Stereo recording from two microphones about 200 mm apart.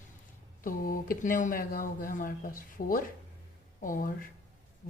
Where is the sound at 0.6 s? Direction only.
45° left (ahead or behind).